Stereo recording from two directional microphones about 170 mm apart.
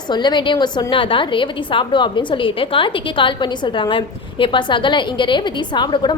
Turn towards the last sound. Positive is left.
turn(degrees=25)  # may be behind; listen again after turning